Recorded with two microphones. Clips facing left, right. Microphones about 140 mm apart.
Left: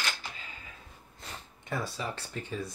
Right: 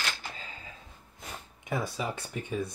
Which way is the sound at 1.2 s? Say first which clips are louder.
Right 2 dB; 10° right (ahead or behind).